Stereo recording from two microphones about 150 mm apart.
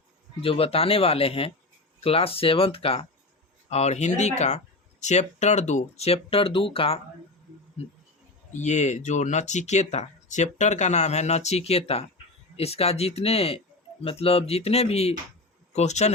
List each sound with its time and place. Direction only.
0.4 s speech: 40° left (ahead or behind)
8.5 s speech: 50° left (ahead or behind)